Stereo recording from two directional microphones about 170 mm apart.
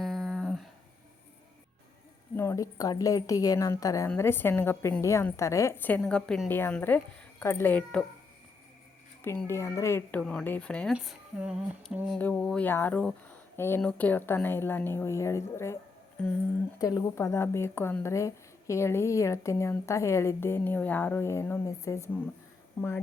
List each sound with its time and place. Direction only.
0.0 s a sound: centre (ahead or behind)
2.3 s a woman's voice: 15° left (ahead or behind)
9.5 s speech: 15° left (ahead or behind)